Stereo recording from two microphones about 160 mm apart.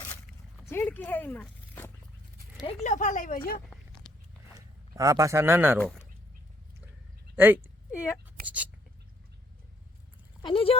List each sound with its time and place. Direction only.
0.7 s speech: 15° left (ahead or behind)
2.8 s speech: 50° left (ahead or behind)
4.1 s biting: 5° left (ahead or behind)
4.9 s speech: 20° right (ahead or behind)
7.3 s speech: 10° right (ahead or behind)
10.4 s speech: 35° left (ahead or behind)